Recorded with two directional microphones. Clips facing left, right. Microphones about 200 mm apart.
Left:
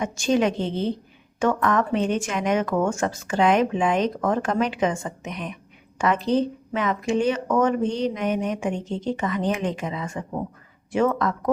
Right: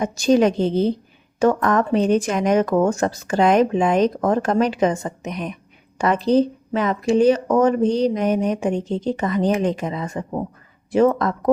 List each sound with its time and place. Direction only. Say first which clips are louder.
0.0 s speech: right 5 dB; 40° right (ahead or behind)